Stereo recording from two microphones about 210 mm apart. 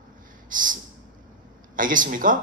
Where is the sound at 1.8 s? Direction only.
40° right (ahead or behind).